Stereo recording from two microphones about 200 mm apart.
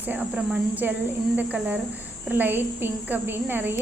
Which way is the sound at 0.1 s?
10° right (ahead or behind).